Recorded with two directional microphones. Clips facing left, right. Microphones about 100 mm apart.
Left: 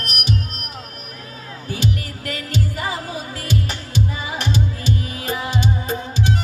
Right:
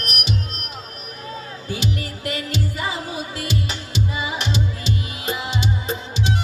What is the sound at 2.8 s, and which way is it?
Music, 40° left (ahead or behind).